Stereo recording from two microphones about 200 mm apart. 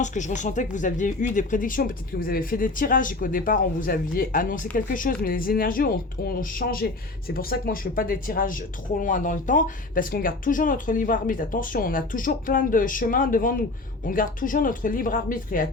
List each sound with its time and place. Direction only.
0.0 s speech: 40° left (ahead or behind)